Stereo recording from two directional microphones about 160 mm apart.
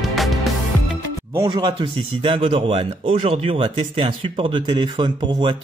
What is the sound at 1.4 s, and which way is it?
Speech, 30° right (ahead or behind).